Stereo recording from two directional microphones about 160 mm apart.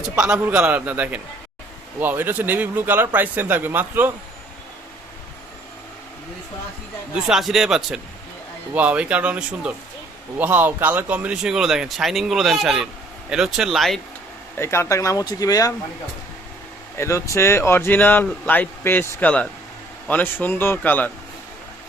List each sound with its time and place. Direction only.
0.2 s speech: 5° right (ahead or behind)
7.1 s speech: centre (ahead or behind)
14.5 s speech: 15° left (ahead or behind)
17.0 s speech: 20° left (ahead or behind)